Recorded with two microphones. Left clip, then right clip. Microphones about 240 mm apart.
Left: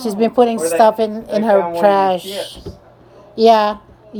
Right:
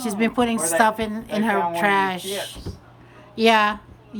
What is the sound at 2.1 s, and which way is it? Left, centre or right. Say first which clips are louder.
Speech: left 9 dB; centre.